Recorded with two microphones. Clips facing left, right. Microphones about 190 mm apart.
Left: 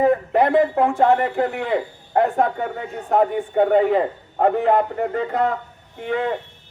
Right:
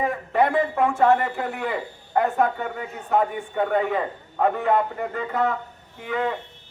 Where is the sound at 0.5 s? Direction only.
35° left (ahead or behind).